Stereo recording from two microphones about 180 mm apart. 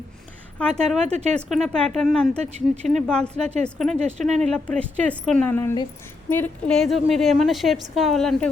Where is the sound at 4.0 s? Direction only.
40° right (ahead or behind).